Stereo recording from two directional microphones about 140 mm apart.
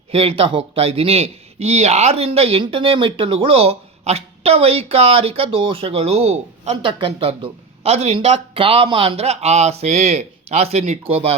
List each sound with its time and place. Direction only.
0.1 s a man's voice: 40° right (ahead or behind)